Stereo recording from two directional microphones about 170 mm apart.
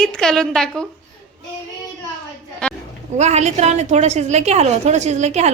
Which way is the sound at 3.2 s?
40° right (ahead or behind).